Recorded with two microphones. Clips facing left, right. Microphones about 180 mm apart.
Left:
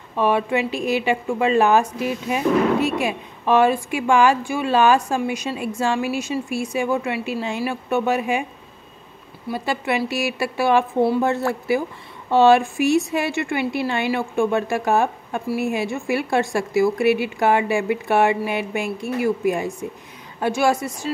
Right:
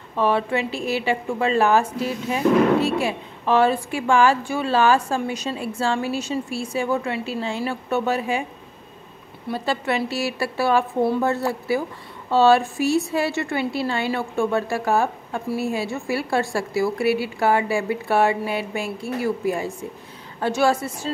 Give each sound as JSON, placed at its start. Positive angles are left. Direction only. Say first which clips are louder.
{"t": 0.1, "sound": "a woman's voice", "louder": "left 1 dB", "side_deg": 15}
{"t": 9.5, "sound": "a woman's voice", "louder": "even", "side_deg": 15}